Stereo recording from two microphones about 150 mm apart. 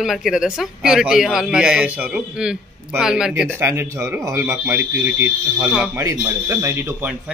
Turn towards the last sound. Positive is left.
turn(degrees=-15)  # may be behind; listen again after turning